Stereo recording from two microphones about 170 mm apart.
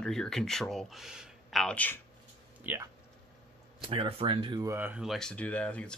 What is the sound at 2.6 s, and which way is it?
Speech, 10° right (ahead or behind).